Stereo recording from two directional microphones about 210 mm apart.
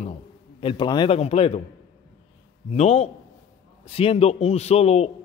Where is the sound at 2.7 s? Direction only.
30° left (ahead or behind).